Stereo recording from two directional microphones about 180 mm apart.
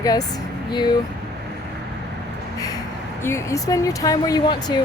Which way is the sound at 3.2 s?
15° left (ahead or behind).